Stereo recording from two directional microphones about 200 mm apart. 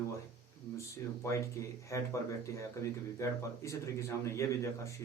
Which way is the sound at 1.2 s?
15° left (ahead or behind).